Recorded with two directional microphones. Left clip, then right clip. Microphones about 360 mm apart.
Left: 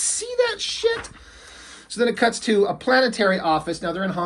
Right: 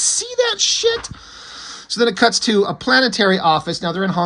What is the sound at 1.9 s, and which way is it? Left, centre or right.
Speech, centre.